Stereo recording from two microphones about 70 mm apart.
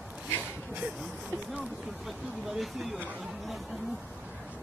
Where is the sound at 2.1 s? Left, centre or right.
Centre.